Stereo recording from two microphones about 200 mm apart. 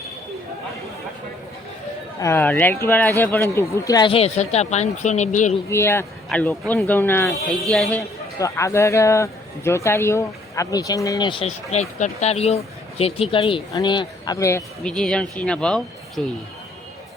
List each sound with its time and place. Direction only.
2.2 s speech: 10° left (ahead or behind); by 5.5 s 35° left (ahead or behind)
5.6 s speech: 10° left (ahead or behind)
11.7 s speech: 35° left (ahead or behind); by 16.2 s 5° left (ahead or behind)